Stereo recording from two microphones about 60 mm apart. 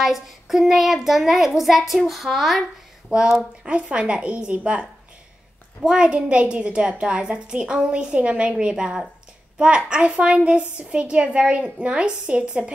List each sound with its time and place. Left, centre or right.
0.0 s a child's voice: centre; by 4.8 s right
5.9 s a woman's voice: centre